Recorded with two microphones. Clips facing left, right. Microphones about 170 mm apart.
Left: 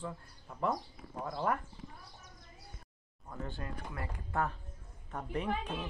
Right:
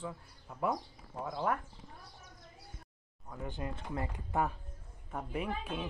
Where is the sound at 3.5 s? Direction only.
20° right (ahead or behind).